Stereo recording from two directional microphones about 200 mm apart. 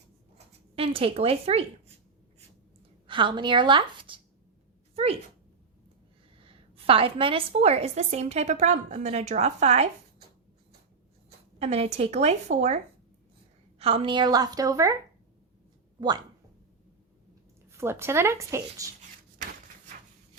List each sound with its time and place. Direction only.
0.3 s speech: 30° right (ahead or behind)
3.1 s a woman's voice: 25° right (ahead or behind)
6.4 s a woman's voice: 25° right (ahead or behind)
11.6 s a woman's voice: 35° right (ahead or behind); by 14.9 s 15° right (ahead or behind)
17.7 s speech: 15° right (ahead or behind)